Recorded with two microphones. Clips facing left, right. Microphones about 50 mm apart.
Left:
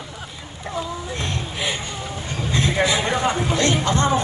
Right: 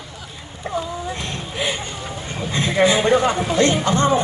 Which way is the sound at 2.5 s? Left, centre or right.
Right.